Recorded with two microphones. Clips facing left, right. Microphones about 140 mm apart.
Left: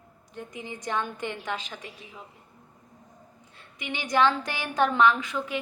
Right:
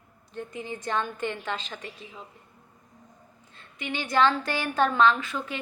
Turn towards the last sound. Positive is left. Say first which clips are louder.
# even
turn(degrees=15)  # may be behind; listen again after turning